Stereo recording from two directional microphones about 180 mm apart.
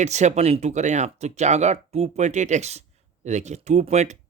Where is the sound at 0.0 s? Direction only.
40° right (ahead or behind).